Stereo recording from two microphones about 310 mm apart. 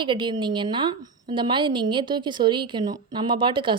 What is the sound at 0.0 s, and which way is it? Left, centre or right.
A woman's voice, centre.